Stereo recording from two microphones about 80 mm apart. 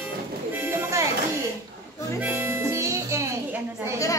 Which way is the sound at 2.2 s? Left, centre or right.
Right.